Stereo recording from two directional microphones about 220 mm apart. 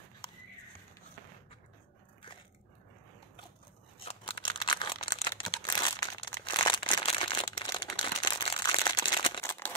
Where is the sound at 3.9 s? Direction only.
25° left (ahead or behind).